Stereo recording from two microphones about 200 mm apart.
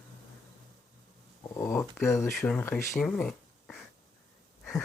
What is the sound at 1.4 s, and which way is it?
Speech, 15° left (ahead or behind).